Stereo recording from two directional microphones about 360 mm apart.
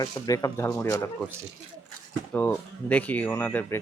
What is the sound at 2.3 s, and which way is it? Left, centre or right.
Speech, centre.